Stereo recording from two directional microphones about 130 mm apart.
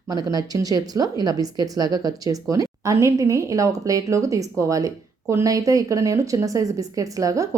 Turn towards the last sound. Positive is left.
turn(degrees=-25)  # may be behind; listen again after turning